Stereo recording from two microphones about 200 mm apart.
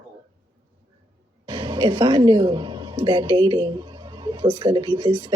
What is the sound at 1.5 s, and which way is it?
A woman's voice, 20° right (ahead or behind).